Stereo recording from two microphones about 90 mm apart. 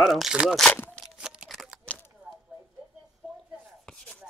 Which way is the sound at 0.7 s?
20° left (ahead or behind).